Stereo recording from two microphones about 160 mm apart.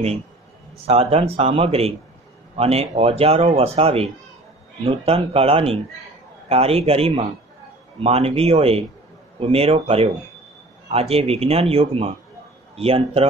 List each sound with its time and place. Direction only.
0.8 s a man's voice: 40° right (ahead or behind)